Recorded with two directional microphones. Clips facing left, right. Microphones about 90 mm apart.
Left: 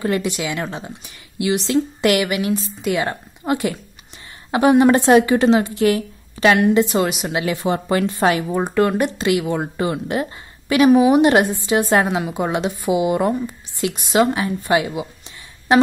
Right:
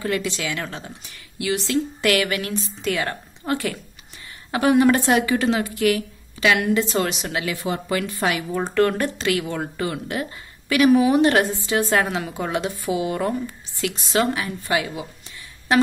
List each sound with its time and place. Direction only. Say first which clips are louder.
0.0 s a woman's voice: left 4 dB; 20° left (ahead or behind)
7.3 s speech: left 7 dB; 30° left (ahead or behind)
8.5 s a woman's voice: left 2 dB; 15° left (ahead or behind)